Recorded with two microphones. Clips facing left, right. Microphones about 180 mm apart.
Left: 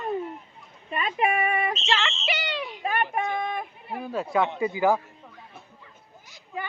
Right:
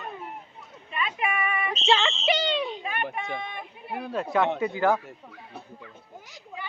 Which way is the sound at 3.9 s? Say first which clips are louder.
Right 1 dB; centre (ahead or behind).